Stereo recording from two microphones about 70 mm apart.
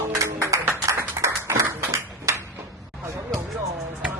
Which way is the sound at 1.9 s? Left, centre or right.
Right.